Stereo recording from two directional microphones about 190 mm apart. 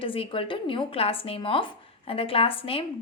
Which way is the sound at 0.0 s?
30° left (ahead or behind).